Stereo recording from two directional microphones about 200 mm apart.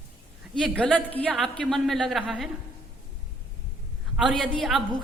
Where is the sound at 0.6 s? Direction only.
5° left (ahead or behind).